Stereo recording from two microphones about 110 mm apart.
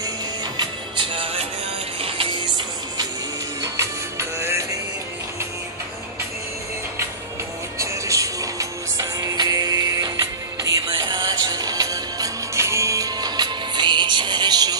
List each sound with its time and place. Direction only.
0.6 s music: 50° right (ahead or behind)
3.6 s music: 25° right (ahead or behind)
7.8 s music: 30° right (ahead or behind)